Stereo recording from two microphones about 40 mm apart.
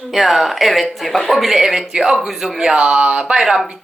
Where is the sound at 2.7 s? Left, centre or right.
Right.